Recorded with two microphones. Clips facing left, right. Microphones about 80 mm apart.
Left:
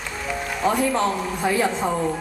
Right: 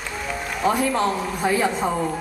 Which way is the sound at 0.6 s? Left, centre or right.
Centre.